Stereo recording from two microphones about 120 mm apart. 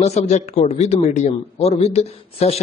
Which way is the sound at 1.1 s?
90° left.